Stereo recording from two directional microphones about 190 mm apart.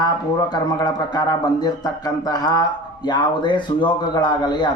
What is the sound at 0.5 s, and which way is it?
Speech, 25° left (ahead or behind).